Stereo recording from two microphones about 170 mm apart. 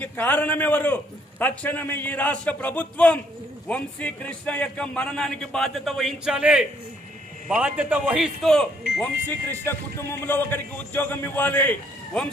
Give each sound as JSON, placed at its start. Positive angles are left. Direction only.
{"t": 0.0, "sound": "a man's voice", "side_deg": 10}